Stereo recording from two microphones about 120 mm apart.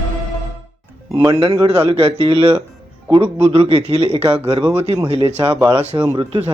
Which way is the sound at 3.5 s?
55° right (ahead or behind).